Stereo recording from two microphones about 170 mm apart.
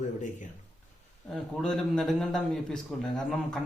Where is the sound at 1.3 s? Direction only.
5° left (ahead or behind).